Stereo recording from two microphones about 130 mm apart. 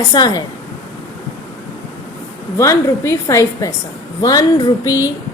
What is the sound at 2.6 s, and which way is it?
A woman's voice, 20° left (ahead or behind).